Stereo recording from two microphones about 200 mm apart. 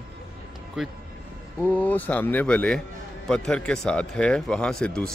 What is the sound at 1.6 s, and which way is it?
Speech, 10° left (ahead or behind).